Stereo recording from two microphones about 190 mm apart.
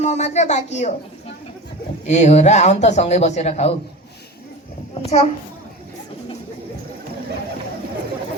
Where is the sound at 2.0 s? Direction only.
35° left (ahead or behind).